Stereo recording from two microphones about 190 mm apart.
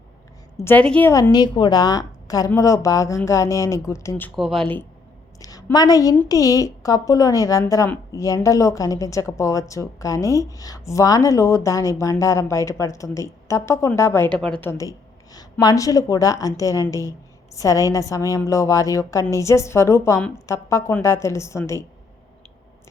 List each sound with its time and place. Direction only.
0.5 s a woman's voice: 10° left (ahead or behind)
1.1 s a woman's voice: 20° left (ahead or behind)
4.4 s speech: centre (ahead or behind)
5.4 s a woman's voice: 20° left (ahead or behind)
14.3 s a woman's voice: 5° left (ahead or behind)